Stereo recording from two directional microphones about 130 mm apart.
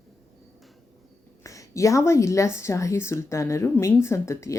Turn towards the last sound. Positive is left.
turn(degrees=20)  # may be behind; listen again after turning